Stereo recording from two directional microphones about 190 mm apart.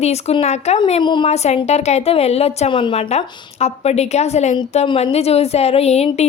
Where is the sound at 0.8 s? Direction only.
25° left (ahead or behind).